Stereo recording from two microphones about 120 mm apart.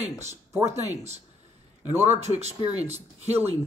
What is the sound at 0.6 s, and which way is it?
A man's voice, 70° right (ahead or behind).